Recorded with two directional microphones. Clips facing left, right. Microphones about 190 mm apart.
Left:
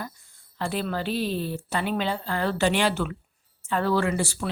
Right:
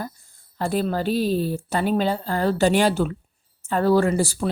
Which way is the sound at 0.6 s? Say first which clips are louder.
Right 5 dB; 45° right (ahead or behind).